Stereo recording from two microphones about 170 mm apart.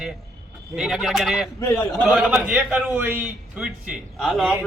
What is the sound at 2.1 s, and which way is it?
A man's voice, centre (ahead or behind).